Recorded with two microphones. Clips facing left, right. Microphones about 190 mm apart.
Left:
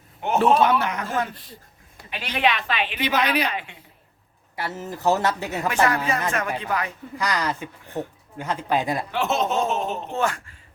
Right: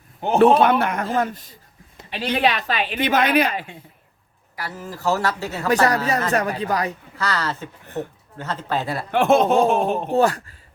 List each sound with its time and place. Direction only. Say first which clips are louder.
0.3 s a man's voice: right 4 dB; 60° right (ahead or behind)
2.0 s speech: right 3 dB; 30° right (ahead or behind)
4.5 s speech: left 2 dB; 25° left (ahead or behind)
5.6 s speech: right 4 dB; 40° right (ahead or behind)
7.2 s speech: even; 15° left (ahead or behind)
9.1 s speech: right 9 dB; 55° right (ahead or behind)
10.1 s speech: right 8 dB; 35° right (ahead or behind)